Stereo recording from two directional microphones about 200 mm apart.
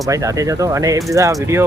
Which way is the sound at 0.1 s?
15° right (ahead or behind).